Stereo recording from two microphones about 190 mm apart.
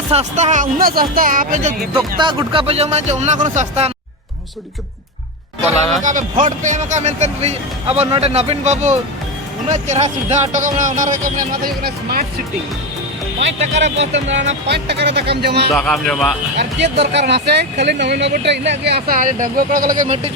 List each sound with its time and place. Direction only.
0.1 s speech: 35° right (ahead or behind)
2.0 s speech: 20° right (ahead or behind); by 3.9 s 35° right (ahead or behind)
6.0 s speech: 40° right (ahead or behind)
13.8 s speech: 35° right (ahead or behind)
14.7 s speech: 60° right (ahead or behind)
15.7 s speech: 5° left (ahead or behind)
16.6 s speech: 65° right (ahead or behind); by 20.3 s 40° right (ahead or behind)